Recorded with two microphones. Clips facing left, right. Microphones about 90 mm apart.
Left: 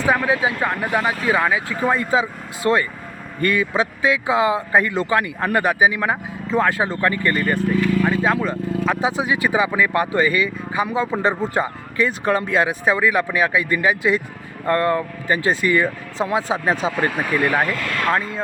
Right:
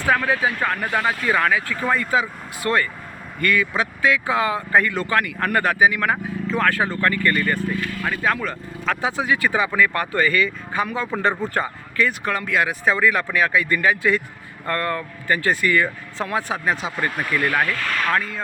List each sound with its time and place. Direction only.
0.0 s speech: 15° left (ahead or behind)